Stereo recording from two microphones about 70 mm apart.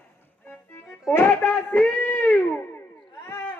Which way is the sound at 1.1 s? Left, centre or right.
Left.